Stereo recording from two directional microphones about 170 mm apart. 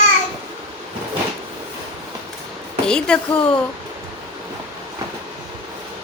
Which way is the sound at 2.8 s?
5° left (ahead or behind).